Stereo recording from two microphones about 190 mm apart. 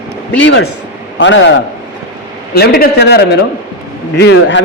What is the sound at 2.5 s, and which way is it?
A man's voice, 55° left (ahead or behind).